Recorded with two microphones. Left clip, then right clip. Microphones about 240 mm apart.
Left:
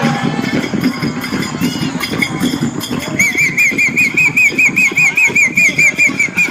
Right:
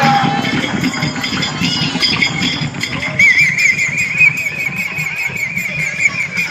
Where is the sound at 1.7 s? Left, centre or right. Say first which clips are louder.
Right 5 dB; right.